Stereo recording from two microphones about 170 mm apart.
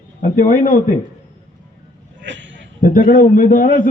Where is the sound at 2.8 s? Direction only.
55° left (ahead or behind).